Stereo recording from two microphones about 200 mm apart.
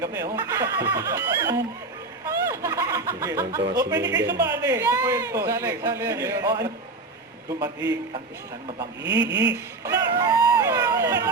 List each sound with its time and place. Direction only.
0.0 s a man's voice: 15° right (ahead or behind)
3.9 s a woman's voice: 60° right (ahead or behind)
4.2 s a man's voice: 15° right (ahead or behind)
9.3 s a woman's voice: 60° right (ahead or behind)
9.8 s speech: 15° right (ahead or behind)